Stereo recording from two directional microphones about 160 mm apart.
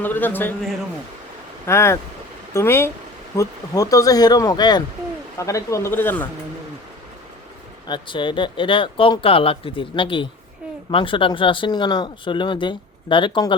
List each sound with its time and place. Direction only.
0.0 s speech: 10° left (ahead or behind)
1.6 s speech: 15° left (ahead or behind)
7.9 s speech: 30° left (ahead or behind)